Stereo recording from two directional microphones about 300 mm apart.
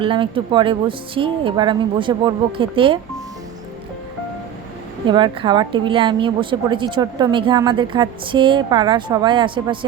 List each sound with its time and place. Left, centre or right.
0.0 s a woman's voice: centre
5.0 s a woman's voice: centre